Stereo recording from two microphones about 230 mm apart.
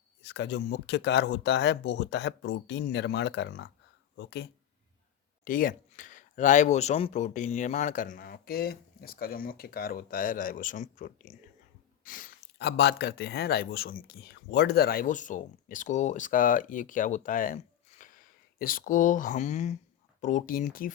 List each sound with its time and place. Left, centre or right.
0.2 s speech: left
5.5 s speech: left